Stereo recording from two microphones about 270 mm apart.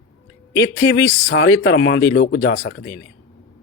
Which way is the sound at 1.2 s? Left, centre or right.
Left.